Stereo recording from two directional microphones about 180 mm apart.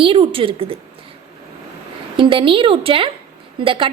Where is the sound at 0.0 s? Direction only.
30° right (ahead or behind).